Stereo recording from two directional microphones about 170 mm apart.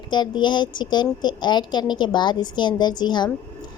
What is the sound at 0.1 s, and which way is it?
A woman's voice, 25° left (ahead or behind).